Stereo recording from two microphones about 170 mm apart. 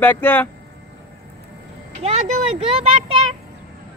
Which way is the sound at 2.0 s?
40° right (ahead or behind).